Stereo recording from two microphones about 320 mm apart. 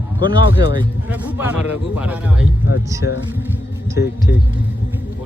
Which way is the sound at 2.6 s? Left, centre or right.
Left.